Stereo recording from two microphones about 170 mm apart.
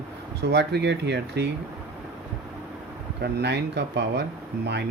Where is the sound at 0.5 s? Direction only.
85° right.